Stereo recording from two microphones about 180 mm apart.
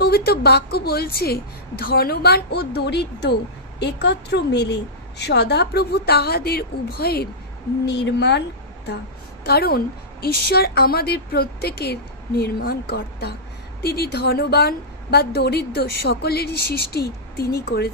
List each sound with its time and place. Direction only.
0.0 s a woman's voice: 60° left (ahead or behind)